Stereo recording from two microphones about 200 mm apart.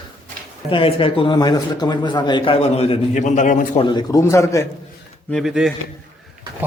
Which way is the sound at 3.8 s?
20° left (ahead or behind).